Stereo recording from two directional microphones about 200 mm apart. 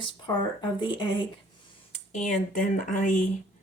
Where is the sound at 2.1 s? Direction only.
35° left (ahead or behind).